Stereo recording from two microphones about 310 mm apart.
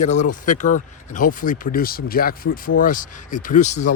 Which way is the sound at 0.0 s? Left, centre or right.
Left.